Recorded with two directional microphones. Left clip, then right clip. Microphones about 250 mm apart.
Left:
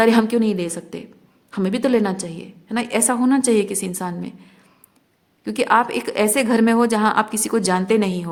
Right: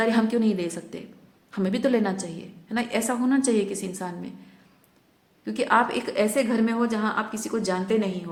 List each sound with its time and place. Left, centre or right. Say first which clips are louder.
0.0 s a woman's voice: left 7 dB; left
5.5 s a woman's voice: left 5 dB; left